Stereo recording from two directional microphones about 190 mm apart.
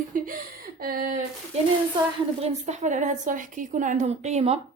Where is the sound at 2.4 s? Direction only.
35° right (ahead or behind).